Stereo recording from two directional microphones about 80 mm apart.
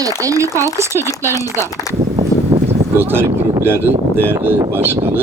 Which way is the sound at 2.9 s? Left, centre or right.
Right.